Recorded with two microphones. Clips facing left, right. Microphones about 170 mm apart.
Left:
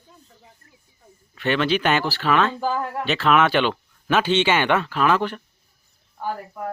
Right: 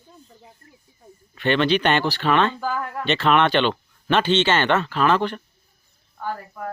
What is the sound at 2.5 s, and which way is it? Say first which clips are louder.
Speech: left 2 dB; 25° left (ahead or behind).